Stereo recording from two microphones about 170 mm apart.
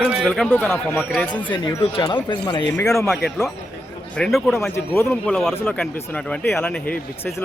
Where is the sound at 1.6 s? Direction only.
25° left (ahead or behind).